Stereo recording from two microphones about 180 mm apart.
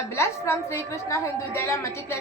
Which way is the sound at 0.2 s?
15° left (ahead or behind).